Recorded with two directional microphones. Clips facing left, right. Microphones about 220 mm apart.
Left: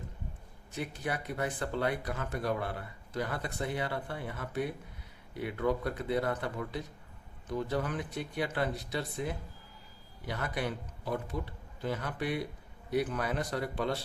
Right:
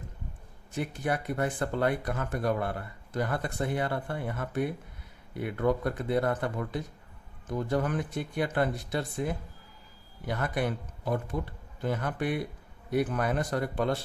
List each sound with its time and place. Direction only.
0.8 s speech: 50° right (ahead or behind)